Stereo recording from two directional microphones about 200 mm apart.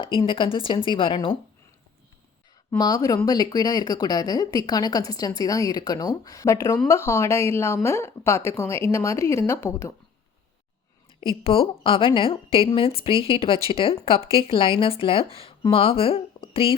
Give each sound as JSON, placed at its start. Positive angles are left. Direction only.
{"t": 0.0, "sound": "speech", "side_deg": 25}
{"t": 2.6, "sound": "a woman's voice", "side_deg": 20}
{"t": 11.2, "sound": "speech", "side_deg": 25}